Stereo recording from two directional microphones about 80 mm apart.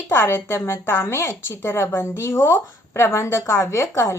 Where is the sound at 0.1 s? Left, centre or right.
Left.